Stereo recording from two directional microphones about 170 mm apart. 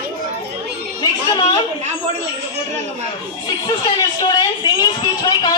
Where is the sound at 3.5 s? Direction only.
25° left (ahead or behind).